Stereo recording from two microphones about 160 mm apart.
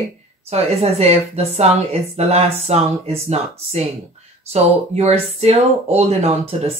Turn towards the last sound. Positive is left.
turn(degrees=-40)  # may be behind; listen again after turning